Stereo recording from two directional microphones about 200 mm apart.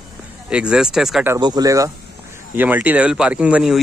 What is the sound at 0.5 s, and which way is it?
Speech, 5° right (ahead or behind).